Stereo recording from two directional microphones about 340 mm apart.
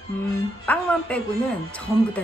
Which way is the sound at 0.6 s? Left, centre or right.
Centre.